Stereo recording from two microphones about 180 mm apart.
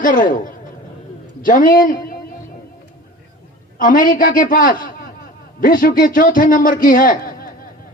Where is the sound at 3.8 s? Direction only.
50° left (ahead or behind).